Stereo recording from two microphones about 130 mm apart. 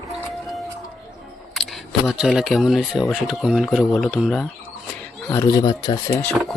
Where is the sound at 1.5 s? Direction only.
Centre (ahead or behind).